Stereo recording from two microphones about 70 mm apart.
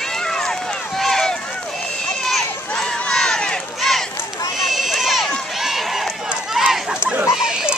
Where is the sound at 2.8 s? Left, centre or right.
Centre.